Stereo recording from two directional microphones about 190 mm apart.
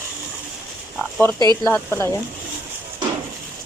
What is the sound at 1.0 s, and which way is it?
Speech, 5° left (ahead or behind).